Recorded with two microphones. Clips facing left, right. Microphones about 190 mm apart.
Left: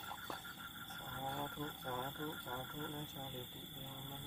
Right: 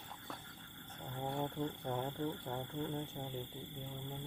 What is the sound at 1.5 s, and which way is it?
Speech, 35° right (ahead or behind).